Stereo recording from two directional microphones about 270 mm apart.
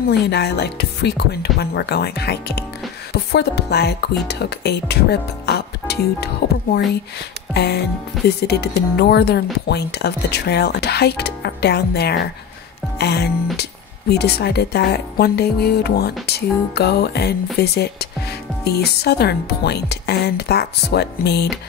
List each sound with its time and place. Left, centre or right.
0.1 s speech: left